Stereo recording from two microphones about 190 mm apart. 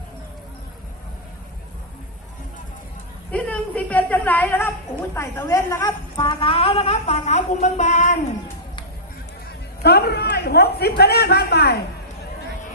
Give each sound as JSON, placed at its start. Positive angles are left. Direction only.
{"t": 3.3, "sound": "a woman's voice", "side_deg": 5}
{"t": 9.8, "sound": "a man's voice", "side_deg": 55}